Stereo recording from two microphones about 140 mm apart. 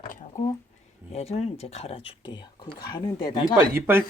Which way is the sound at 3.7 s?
15° right (ahead or behind).